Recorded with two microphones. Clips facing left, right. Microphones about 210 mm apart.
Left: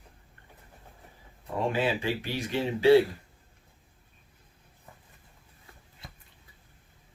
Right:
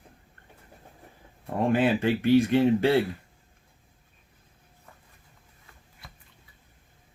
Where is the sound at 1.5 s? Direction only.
55° right (ahead or behind).